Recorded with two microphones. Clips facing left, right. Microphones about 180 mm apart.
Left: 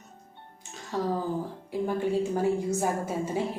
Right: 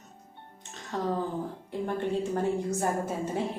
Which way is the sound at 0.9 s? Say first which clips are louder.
Left 1 dB; 5° left (ahead or behind).